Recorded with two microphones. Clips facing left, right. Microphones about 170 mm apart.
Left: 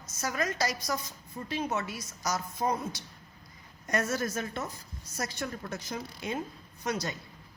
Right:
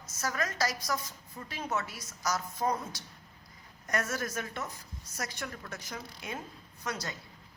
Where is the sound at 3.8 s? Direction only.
25° left (ahead or behind).